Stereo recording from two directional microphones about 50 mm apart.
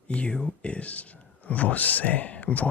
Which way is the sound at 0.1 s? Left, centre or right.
Left.